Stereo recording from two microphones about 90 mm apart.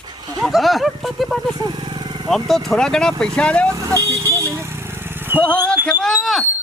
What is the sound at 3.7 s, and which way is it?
Speech, 35° right (ahead or behind).